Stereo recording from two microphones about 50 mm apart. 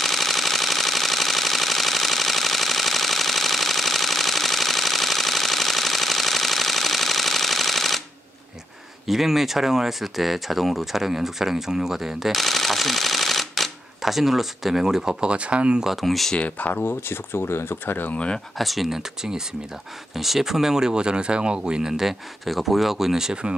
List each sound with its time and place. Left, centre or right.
0.0 s machine gun: centre
9.0 s speech: centre; by 15.8 s right
15.8 s speech: centre
16.3 s speech: left
16.7 s speech: left
18.1 s speech: left
18.6 s speech: centre